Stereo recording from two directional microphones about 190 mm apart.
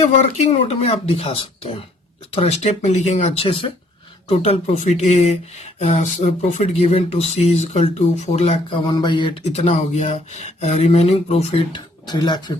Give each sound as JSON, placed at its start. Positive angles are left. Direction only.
{"t": 0.0, "sound": "speech", "side_deg": 35}